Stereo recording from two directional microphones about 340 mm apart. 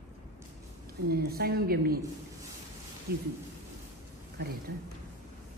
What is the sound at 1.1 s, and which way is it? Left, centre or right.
Speech, right.